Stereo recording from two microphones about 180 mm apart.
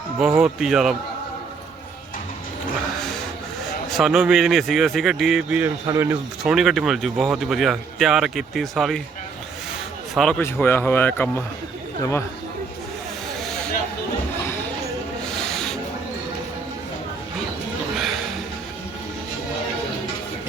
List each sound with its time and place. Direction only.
0.2 s speech: 5° right (ahead or behind)
3.8 s speech: centre (ahead or behind); by 6.1 s 15° right (ahead or behind)
6.4 s speech: centre (ahead or behind)
10.2 s speech: 5° left (ahead or behind)
15.4 s rub: 5° left (ahead or behind)
17.9 s music: centre (ahead or behind)